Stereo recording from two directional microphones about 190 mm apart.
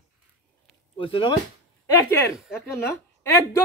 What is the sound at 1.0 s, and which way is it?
Speech, 30° left (ahead or behind).